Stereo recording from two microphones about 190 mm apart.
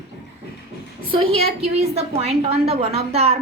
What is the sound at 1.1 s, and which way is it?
A woman's voice, 30° right (ahead or behind).